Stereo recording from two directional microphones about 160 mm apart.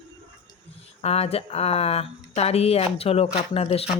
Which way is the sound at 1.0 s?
40° left (ahead or behind).